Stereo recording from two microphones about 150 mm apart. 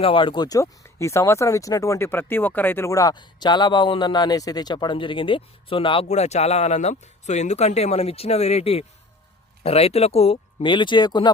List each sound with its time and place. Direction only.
0.0 s speech: 35° left (ahead or behind)
6.1 s speech: 45° left (ahead or behind); by 11.3 s 30° left (ahead or behind)